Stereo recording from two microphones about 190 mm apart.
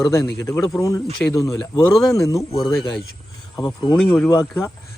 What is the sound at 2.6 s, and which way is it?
Speech, centre (ahead or behind).